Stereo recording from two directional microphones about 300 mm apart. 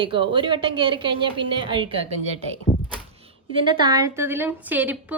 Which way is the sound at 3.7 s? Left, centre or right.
Centre.